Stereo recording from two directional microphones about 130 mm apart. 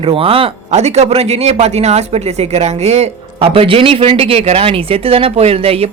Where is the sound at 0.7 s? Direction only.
60° right (ahead or behind).